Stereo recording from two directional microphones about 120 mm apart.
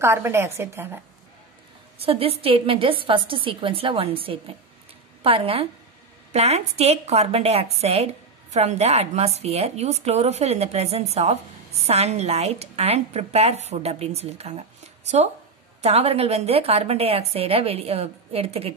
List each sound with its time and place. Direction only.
0.0 s a woman's voice: 20° right (ahead or behind)
2.0 s a woman's voice: 50° right (ahead or behind)
15.8 s a woman's voice: 60° right (ahead or behind)